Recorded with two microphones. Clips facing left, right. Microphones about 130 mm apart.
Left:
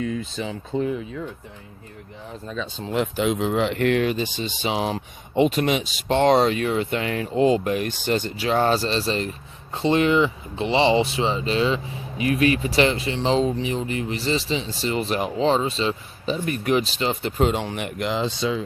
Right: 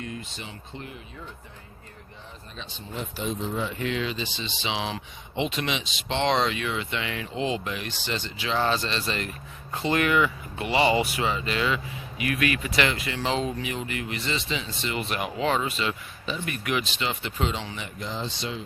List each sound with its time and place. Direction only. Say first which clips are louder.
2.8 s speech: left 9 dB; 90° left